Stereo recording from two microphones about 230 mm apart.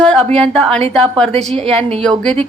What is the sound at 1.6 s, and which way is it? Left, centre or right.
Speech, right.